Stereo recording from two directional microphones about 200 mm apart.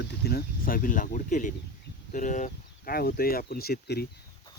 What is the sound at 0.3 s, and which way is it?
Speech, 50° left (ahead or behind).